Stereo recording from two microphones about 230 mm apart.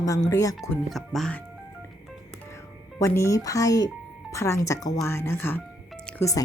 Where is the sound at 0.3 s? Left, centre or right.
Centre.